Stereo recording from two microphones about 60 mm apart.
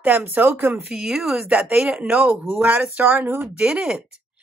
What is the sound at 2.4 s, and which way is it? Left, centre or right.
Speech, right.